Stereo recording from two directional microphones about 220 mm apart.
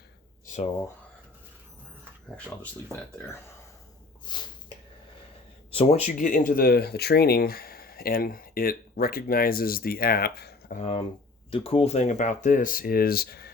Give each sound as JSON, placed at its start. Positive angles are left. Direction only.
{"t": 0.4, "sound": "a sound", "side_deg": 35}
{"t": 4.3, "sound": "speech", "side_deg": 20}
{"t": 5.7, "sound": "speech", "side_deg": 25}
{"t": 10.8, "sound": "speech", "side_deg": 30}